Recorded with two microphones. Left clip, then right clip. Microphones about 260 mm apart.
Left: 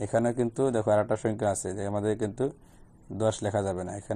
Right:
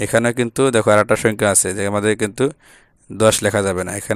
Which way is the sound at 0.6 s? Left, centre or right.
Right.